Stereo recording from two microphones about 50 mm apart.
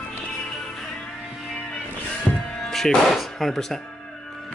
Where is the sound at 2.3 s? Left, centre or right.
Left.